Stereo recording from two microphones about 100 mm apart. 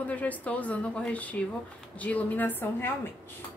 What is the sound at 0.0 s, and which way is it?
A woman's voice, 15° left (ahead or behind).